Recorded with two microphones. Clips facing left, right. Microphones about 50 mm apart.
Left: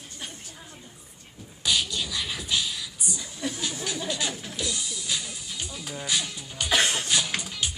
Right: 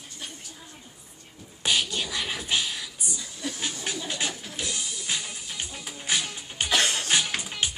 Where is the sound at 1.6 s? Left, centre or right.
Right.